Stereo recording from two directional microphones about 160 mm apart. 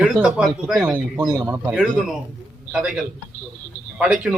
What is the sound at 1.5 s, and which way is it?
A man's voice, 5° right (ahead or behind).